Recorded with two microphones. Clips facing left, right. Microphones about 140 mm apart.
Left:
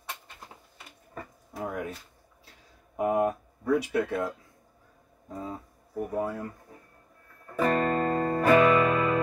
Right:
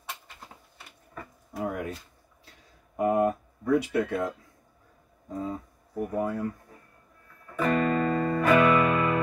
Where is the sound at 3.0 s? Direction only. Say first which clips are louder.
Right 2 dB; 5° left (ahead or behind).